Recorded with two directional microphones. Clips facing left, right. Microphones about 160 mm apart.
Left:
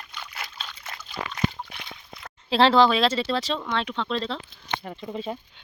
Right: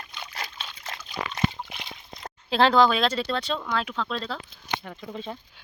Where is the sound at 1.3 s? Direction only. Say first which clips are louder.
Even; 20° right (ahead or behind).